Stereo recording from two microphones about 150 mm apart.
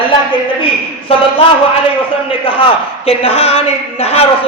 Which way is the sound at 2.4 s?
40° left (ahead or behind).